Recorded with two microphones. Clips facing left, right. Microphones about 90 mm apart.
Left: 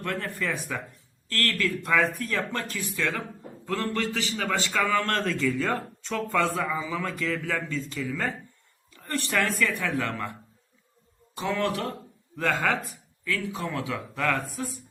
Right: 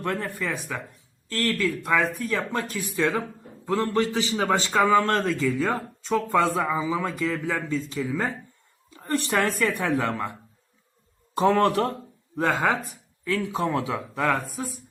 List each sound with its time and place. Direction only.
0.0 s speech: 20° right (ahead or behind)
0.4 s speech: centre (ahead or behind)
1.3 s a man's voice: 15° right (ahead or behind)
8.9 s a sound: 20° right (ahead or behind)
9.4 s speech: 25° right (ahead or behind)
11.3 s speech: 45° right (ahead or behind)
12.4 s speech: 20° right (ahead or behind)
13.2 s speech: 30° right (ahead or behind)